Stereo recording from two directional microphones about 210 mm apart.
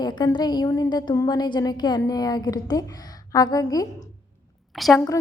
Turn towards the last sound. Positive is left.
turn(degrees=0)  # may be behind; listen again after turning